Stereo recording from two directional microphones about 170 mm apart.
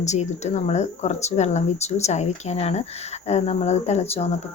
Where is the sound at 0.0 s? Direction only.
40° left (ahead or behind).